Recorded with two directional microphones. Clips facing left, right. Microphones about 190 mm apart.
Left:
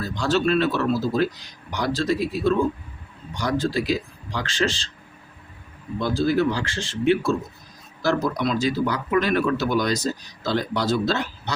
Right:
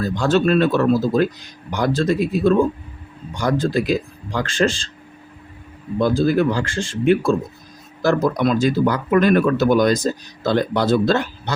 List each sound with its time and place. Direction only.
0.0 s speech: 50° right (ahead or behind)
6.1 s speech: 50° right (ahead or behind)